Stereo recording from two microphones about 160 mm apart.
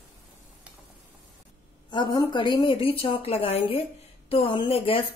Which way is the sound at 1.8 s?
30° left (ahead or behind).